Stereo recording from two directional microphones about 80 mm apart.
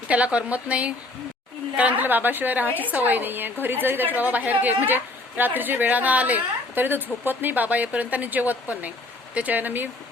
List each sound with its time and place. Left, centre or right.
0.1 s a woman's voice: centre